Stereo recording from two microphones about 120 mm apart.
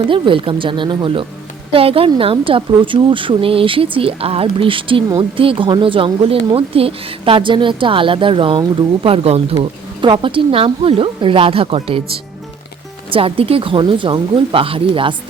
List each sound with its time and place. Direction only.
0.1 s a woman's voice: 45° right (ahead or behind)
9.0 s a woman's voice: 55° right (ahead or behind)
9.6 s a woman's voice: 45° right (ahead or behind)
13.1 s a woman's voice: 50° right (ahead or behind)